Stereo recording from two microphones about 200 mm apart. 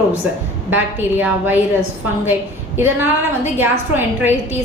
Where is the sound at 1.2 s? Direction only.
10° right (ahead or behind).